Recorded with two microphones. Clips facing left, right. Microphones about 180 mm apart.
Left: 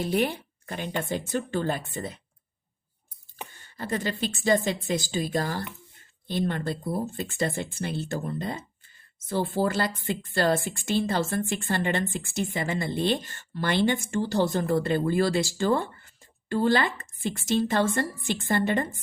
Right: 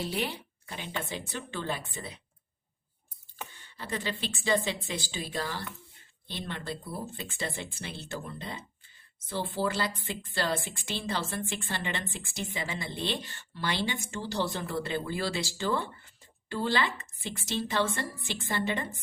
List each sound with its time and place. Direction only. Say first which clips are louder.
0.0 s a woman's voice: left 7 dB; 50° left (ahead or behind)
3.5 s a woman's voice: left 7 dB; 45° left (ahead or behind)